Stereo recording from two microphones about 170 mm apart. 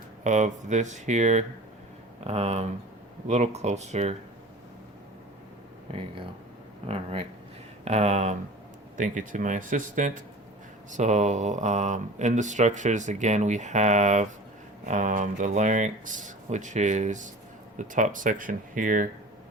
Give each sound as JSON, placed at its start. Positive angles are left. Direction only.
{"t": 0.3, "sound": "speech", "side_deg": -45}
{"t": 6.8, "sound": "speech", "side_deg": -35}